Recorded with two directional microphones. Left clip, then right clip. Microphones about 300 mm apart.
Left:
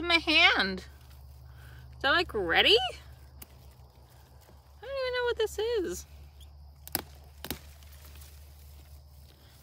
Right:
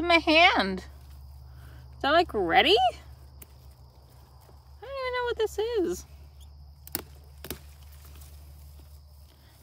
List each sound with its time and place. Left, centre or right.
0.0 s a woman's voice: right
4.7 s cat: right
7.4 s a sound: centre